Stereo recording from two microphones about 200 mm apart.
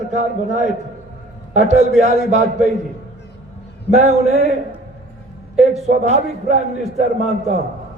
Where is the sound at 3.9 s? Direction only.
35° right (ahead or behind).